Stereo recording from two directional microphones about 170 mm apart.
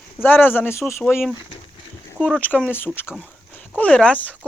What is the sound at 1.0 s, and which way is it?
Speech, centre (ahead or behind).